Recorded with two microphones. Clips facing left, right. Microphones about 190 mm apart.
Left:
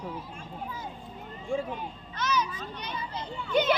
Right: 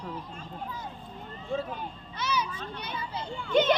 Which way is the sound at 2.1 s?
10° right (ahead or behind).